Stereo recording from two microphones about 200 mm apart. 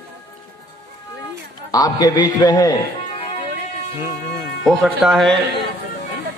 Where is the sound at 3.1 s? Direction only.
35° left (ahead or behind).